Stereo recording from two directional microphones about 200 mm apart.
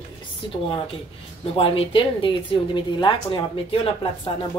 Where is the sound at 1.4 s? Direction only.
30° left (ahead or behind).